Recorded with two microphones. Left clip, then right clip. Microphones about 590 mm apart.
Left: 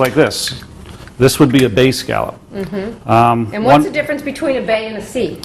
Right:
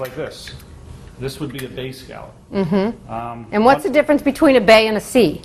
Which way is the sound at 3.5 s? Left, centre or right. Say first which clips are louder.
Right 3 dB; right.